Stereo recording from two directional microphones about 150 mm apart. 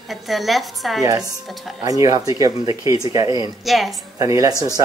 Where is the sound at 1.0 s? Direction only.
25° right (ahead or behind).